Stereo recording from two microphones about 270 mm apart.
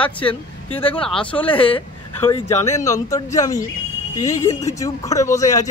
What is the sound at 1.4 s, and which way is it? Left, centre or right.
Speech, centre.